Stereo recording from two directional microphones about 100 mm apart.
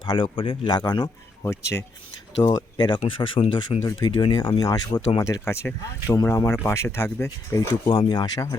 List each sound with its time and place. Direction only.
0.0 s speech: 50° left (ahead or behind)
1.4 s speech: 30° left (ahead or behind)
2.4 s speech: 45° left (ahead or behind)
3.0 s speech: 60° left (ahead or behind); by 5.2 s 40° left (ahead or behind)
5.2 s speech: 30° left (ahead or behind)
7.7 s speech: 50° left (ahead or behind)